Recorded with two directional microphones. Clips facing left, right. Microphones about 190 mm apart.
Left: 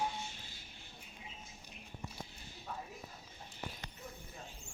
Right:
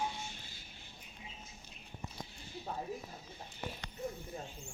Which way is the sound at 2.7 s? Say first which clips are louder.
Right 4 dB; 30° right (ahead or behind).